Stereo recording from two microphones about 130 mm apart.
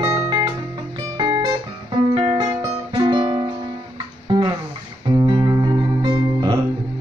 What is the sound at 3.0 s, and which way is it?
Music, 35° right (ahead or behind).